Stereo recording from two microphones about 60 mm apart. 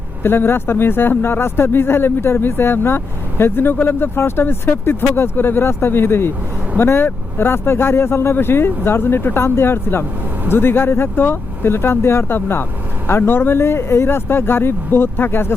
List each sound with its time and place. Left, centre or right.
0.2 s speech: left